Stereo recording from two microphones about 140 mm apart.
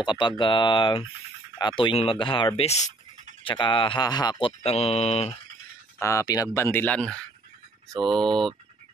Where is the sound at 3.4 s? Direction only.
35° left (ahead or behind).